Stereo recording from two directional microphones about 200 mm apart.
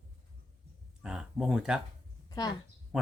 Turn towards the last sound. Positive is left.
turn(degrees=-5)  # may be behind; listen again after turning